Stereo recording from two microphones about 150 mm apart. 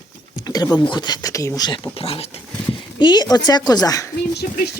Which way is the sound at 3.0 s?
30° left (ahead or behind).